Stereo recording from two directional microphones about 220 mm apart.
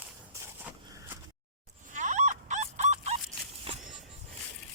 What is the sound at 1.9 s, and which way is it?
Fowl, 35° right (ahead or behind).